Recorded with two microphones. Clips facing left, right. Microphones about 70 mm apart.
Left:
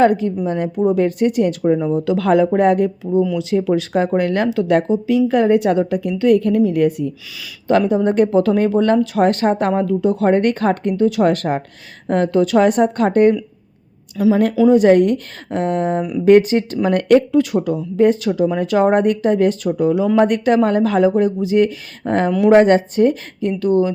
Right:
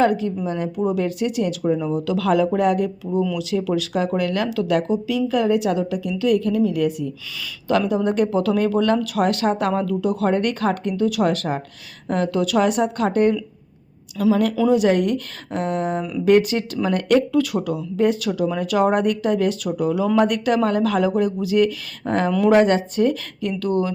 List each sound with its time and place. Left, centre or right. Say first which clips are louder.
0.0 s a woman's voice: left 4 dB; left
7.7 s speech: left 5 dB; left
14.2 s speech: left 4 dB; left
16.9 s a woman's voice: left 5 dB; left
17.3 s speech: left 4 dB; left